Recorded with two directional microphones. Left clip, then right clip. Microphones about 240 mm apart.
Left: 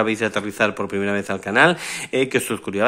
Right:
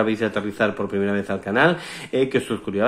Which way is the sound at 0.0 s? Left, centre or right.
Left.